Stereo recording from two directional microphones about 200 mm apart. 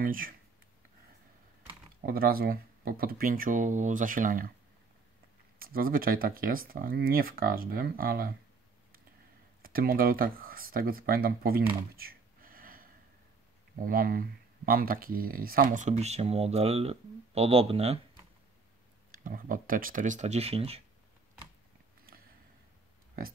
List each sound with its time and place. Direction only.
0.0 s speech: 45° right (ahead or behind)
2.0 s speech: 45° right (ahead or behind)
5.6 s speech: 45° right (ahead or behind)
9.6 s speech: 45° right (ahead or behind)
11.9 s a sound: 45° right (ahead or behind)
13.7 s speech: 45° right (ahead or behind); by 18.2 s 30° right (ahead or behind)
19.1 s speech: 45° right (ahead or behind)